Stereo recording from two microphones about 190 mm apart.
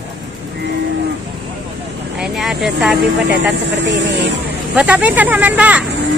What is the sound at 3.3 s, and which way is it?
Speech, 65° right (ahead or behind).